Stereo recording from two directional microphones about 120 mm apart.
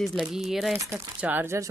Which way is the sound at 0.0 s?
Centre (ahead or behind).